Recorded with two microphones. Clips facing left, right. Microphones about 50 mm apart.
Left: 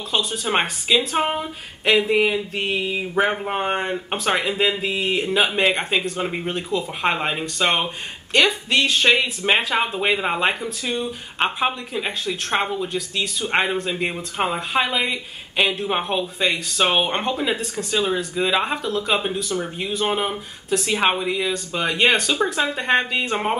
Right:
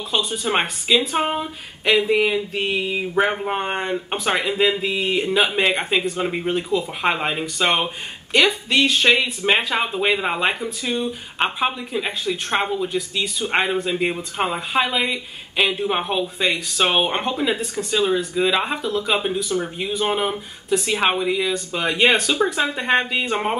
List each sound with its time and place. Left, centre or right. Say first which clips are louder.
0.1 s speech: even; centre